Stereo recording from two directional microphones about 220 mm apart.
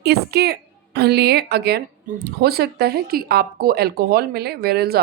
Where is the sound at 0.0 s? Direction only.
45° right (ahead or behind).